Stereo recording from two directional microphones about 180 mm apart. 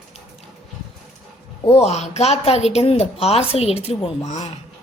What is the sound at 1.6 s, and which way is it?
A woman's voice, 35° left (ahead or behind).